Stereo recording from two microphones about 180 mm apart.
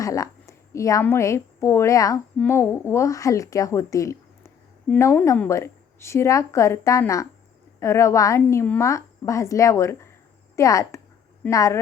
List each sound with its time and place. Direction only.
0.0 s a woman's voice: 20° left (ahead or behind)